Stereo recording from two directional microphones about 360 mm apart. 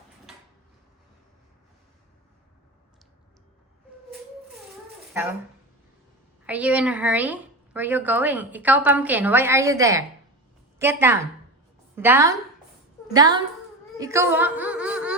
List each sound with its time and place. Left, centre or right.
6.4 s a woman's voice: centre